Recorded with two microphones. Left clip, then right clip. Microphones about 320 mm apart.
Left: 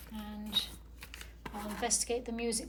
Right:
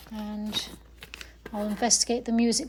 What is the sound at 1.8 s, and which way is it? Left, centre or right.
Speech, centre.